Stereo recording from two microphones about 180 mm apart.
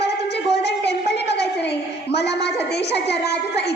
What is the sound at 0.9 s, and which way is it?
A woman's voice, 70° left (ahead or behind).